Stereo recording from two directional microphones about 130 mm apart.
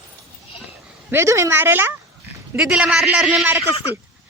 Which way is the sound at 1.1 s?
20° right (ahead or behind).